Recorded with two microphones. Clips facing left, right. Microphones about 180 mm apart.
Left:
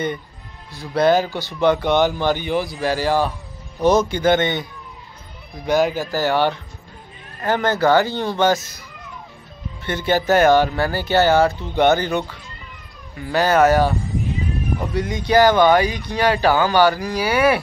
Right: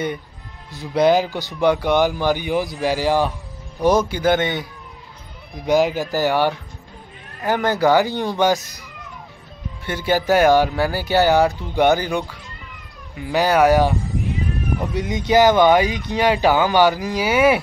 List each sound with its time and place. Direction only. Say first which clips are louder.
0.7 s speech: right 1 dB; 15° right (ahead or behind)
5.7 s speech: right 1 dB; 15° right (ahead or behind)
9.8 s speech: even; 10° right (ahead or behind)
15.0 s speech: even; 20° right (ahead or behind)